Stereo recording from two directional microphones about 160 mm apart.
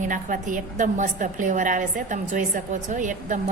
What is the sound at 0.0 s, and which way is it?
A woman's voice, 55° right (ahead or behind).